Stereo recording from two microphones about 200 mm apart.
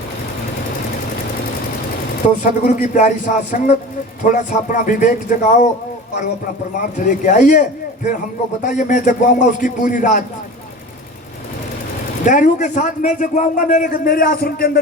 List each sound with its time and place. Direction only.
2.4 s a man's voice: 40° left (ahead or behind)
7.0 s a man's voice: 40° left (ahead or behind)
12.2 s a man's voice: 40° left (ahead or behind)